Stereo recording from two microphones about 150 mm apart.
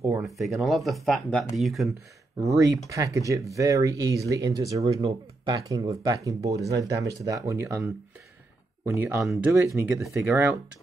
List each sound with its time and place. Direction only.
0.0 s speech: 15° right (ahead or behind)
0.6 s speech: centre (ahead or behind)
2.3 s speech: 20° right (ahead or behind)
9.2 s speech: centre (ahead or behind)
10.1 s speech: 15° right (ahead or behind)